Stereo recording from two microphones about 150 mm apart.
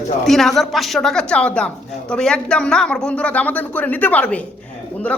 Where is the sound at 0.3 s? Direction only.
Centre (ahead or behind).